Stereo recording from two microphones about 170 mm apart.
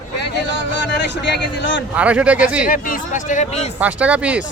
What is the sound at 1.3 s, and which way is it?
Speech, 90° left.